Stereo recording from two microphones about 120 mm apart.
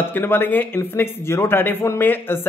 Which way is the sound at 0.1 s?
15° left (ahead or behind).